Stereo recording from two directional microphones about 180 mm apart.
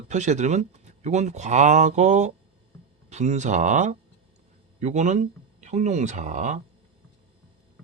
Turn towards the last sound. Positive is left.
turn(degrees=-40)  # may be behind; listen again after turning